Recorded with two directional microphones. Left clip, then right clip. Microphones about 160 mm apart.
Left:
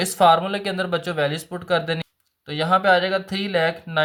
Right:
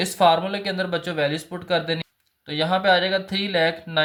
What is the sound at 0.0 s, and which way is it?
Speech, 35° left (ahead or behind).